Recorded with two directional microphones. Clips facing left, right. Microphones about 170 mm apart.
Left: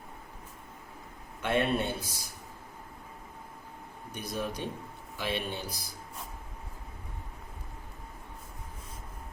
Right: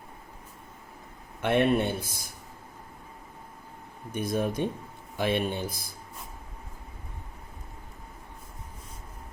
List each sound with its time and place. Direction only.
1.4 s a man's voice: 60° right (ahead or behind)
4.1 s speech: 50° right (ahead or behind)